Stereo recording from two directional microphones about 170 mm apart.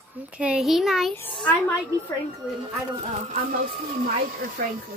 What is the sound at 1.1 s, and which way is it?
A woman's voice, 10° left (ahead or behind).